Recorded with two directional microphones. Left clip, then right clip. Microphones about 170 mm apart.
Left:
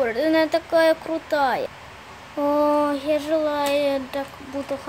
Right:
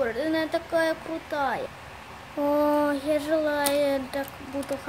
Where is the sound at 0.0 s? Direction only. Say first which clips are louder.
Left 6 dB; 35° left (ahead or behind).